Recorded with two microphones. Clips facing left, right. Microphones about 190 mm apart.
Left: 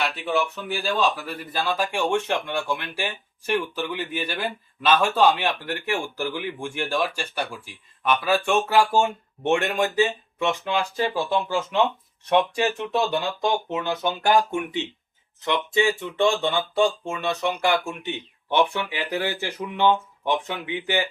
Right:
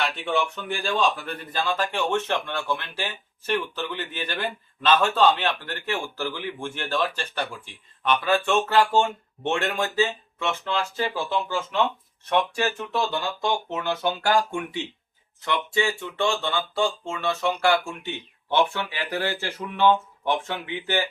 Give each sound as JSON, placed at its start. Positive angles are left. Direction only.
{"t": 0.0, "sound": "speech", "side_deg": 5}